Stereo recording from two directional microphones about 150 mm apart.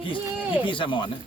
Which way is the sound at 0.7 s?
35° left (ahead or behind).